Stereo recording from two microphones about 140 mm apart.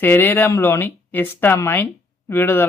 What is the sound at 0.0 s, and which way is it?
A woman's voice, 15° left (ahead or behind).